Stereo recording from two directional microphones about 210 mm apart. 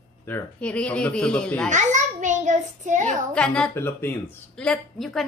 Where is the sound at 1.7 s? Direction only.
35° right (ahead or behind).